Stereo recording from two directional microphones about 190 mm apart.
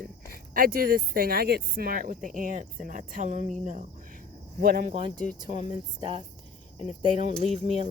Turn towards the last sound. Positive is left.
turn(degrees=-30)  # may be behind; listen again after turning